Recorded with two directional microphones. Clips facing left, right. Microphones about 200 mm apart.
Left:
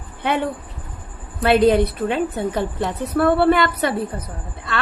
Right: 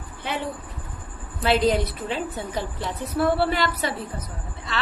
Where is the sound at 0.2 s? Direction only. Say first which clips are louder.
Left 8 dB; 60° left (ahead or behind).